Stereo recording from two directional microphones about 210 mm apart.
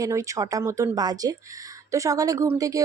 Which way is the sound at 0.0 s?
15° right (ahead or behind).